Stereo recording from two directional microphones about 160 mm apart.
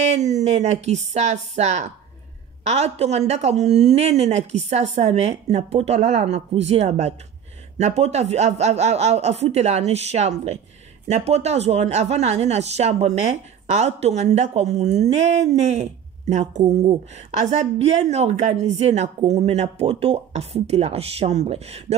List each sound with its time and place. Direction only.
0.0 s speech: 45° right (ahead or behind)